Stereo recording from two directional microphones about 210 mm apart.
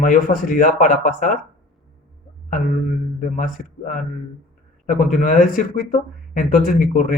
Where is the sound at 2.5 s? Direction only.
40° left (ahead or behind).